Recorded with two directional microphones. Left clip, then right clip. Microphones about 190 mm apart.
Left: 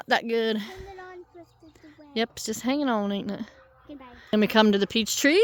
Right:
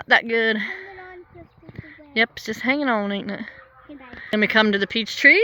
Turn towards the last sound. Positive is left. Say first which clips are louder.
# right 7 dB
turn(degrees=40)  # may be behind; listen again after turning